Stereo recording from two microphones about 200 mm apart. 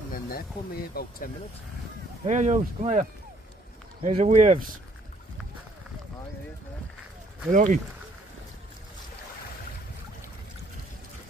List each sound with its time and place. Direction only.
0.1 s speech: 50° left (ahead or behind)
2.2 s speech: 35° right (ahead or behind)
7.5 s speech: 40° right (ahead or behind)